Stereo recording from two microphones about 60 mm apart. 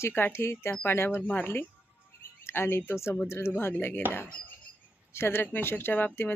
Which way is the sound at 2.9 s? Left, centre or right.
Left.